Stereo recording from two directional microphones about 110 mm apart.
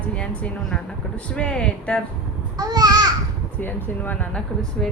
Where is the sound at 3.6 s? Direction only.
15° left (ahead or behind).